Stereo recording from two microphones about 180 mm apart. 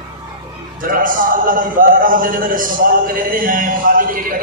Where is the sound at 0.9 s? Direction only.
50° right (ahead or behind).